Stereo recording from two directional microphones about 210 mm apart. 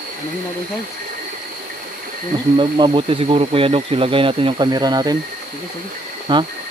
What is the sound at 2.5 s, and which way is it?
Speech, 25° right (ahead or behind).